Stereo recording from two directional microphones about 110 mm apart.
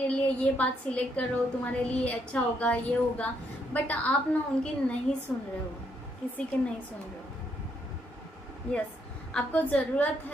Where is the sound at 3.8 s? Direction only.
15° left (ahead or behind).